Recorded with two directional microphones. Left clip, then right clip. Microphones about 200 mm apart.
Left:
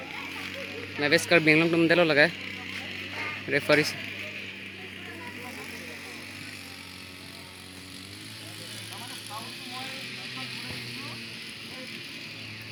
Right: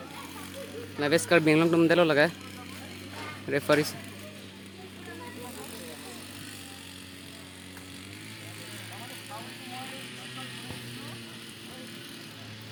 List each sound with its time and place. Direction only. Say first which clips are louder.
0.9 s speech: left 1 dB; 5° right (ahead or behind)
3.5 s speech: left 2 dB; centre (ahead or behind)
10.3 s vehicle: left 4 dB; 35° right (ahead or behind)